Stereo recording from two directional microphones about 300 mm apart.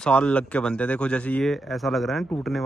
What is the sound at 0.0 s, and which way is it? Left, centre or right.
Speech, centre.